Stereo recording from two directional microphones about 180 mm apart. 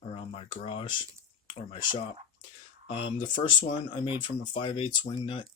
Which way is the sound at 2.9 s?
30° left (ahead or behind).